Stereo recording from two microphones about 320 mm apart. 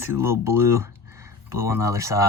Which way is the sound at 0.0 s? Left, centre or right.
Centre.